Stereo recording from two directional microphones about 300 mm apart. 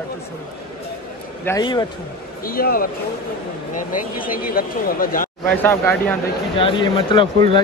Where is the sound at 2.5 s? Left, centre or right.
Left.